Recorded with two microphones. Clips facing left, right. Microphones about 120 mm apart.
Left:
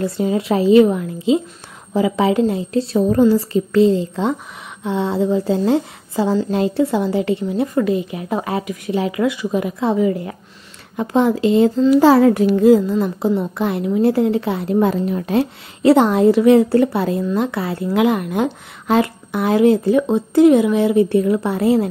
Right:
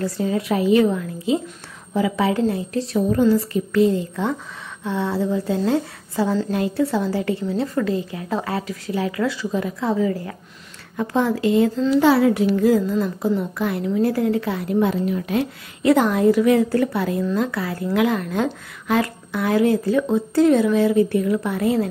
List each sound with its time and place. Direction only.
0.0 s a woman's voice: 25° left (ahead or behind)
2.9 s a woman's voice: 35° left (ahead or behind)
12.0 s a child's voice: 40° left (ahead or behind)
12.5 s a woman's voice: 25° left (ahead or behind)
14.8 s a woman's voice: 40° left (ahead or behind)